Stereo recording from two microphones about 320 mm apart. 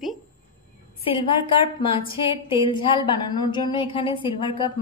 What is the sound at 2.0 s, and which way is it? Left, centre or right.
A woman's voice, centre.